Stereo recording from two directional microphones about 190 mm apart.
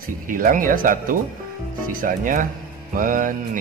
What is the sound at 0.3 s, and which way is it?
Speech, 45° right (ahead or behind).